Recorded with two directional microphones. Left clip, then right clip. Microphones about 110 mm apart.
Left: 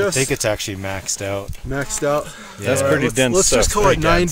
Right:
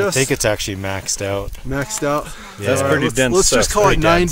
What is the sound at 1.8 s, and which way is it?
Speech, 55° right (ahead or behind).